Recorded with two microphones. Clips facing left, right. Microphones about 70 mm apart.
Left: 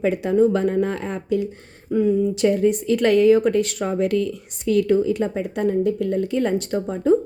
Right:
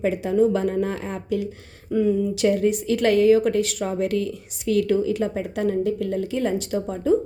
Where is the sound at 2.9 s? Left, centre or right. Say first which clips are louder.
Left 1 dB; left.